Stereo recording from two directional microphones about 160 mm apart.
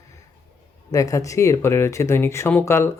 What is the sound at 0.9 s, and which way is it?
A man's voice, 20° left (ahead or behind).